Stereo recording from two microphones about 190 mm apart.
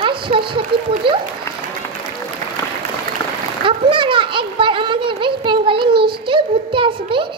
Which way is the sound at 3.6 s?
25° right (ahead or behind).